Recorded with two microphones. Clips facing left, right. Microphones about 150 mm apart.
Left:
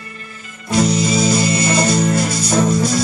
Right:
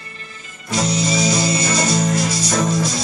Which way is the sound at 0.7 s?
55° left (ahead or behind).